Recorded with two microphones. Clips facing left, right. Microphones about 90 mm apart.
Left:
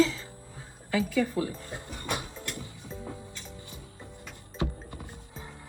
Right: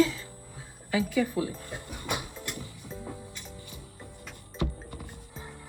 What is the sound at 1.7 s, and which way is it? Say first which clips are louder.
Speech: even; 20° left (ahead or behind).